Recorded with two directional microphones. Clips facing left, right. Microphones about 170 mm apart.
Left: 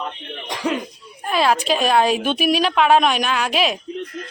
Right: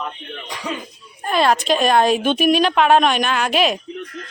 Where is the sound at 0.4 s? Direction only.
75° left (ahead or behind).